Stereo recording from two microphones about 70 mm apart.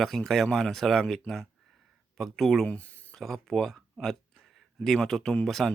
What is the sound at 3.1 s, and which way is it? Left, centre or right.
Speech, centre.